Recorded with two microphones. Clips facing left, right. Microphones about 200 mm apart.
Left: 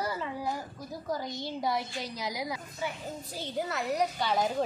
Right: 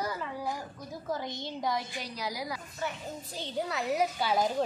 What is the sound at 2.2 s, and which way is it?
Speech, 20° left (ahead or behind).